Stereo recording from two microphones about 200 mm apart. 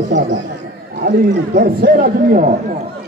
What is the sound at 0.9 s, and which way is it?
A man's voice, 45° right (ahead or behind).